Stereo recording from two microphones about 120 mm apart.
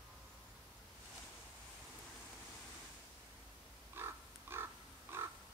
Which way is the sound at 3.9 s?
20° right (ahead or behind).